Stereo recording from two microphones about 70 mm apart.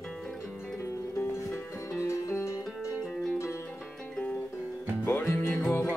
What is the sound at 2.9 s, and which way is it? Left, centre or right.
Music, centre.